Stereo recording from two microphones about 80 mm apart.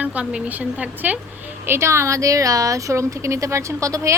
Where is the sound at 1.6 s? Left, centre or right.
Right.